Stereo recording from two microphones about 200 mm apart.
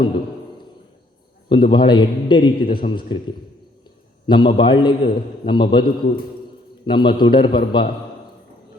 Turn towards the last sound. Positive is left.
turn(degrees=25)  # may be behind; listen again after turning